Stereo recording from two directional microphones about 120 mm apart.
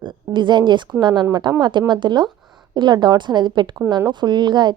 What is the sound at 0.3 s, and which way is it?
Speech, 40° right (ahead or behind).